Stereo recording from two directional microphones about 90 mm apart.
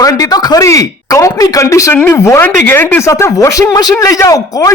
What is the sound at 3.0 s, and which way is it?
Speech, 35° left (ahead or behind).